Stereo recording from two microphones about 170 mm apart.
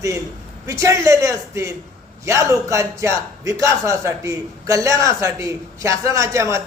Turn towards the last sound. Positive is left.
turn(degrees=-15)  # may be behind; listen again after turning